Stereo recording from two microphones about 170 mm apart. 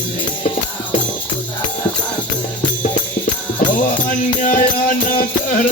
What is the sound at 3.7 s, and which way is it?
Music, 50° left (ahead or behind).